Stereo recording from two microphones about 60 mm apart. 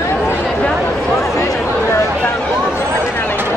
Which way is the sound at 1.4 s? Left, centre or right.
Left.